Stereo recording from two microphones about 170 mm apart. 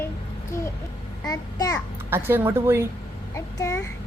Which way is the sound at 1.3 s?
20° left (ahead or behind).